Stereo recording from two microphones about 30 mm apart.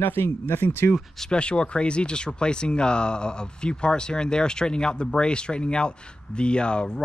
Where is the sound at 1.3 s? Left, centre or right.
Left.